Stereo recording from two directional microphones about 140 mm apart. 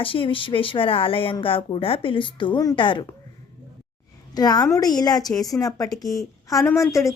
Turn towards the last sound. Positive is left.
turn(degrees=20)  # may be behind; listen again after turning